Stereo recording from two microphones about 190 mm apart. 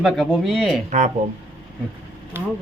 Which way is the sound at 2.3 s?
10° right (ahead or behind).